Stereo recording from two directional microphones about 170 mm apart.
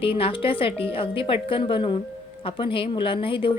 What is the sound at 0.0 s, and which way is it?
A woman's voice, 30° left (ahead or behind).